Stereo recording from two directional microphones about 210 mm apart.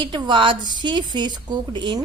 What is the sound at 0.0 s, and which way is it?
A woman's voice, 20° right (ahead or behind).